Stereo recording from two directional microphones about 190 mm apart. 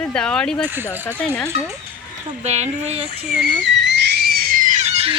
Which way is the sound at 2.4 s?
35° right (ahead or behind).